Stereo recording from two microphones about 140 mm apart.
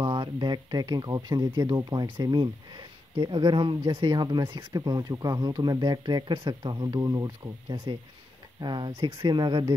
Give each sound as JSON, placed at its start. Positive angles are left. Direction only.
{"t": 0.0, "sound": "speech", "side_deg": -35}
{"t": 7.7, "sound": "speech", "side_deg": -40}